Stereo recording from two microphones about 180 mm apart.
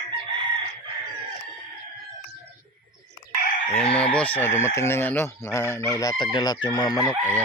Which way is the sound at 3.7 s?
5° left (ahead or behind).